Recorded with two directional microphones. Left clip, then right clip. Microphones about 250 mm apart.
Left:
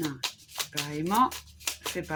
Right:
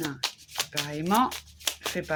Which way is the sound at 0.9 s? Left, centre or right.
Right.